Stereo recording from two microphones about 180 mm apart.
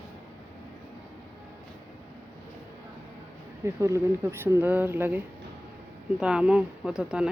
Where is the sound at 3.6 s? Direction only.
15° right (ahead or behind).